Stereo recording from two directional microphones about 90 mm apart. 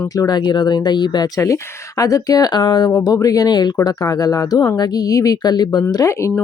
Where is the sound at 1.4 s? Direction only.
35° left (ahead or behind).